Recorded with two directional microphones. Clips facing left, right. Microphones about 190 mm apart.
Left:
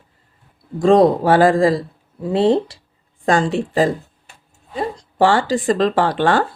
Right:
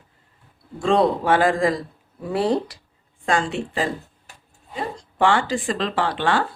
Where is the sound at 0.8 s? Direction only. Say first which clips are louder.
Left 6 dB; 40° left (ahead or behind).